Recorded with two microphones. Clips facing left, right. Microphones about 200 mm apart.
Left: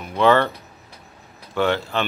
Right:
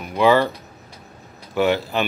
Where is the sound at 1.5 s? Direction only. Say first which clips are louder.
Right 2 dB; 10° right (ahead or behind).